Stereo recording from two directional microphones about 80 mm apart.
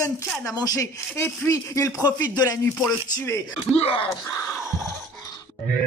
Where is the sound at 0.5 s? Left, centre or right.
Left.